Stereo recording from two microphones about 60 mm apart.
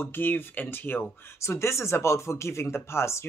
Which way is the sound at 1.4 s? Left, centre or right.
Left.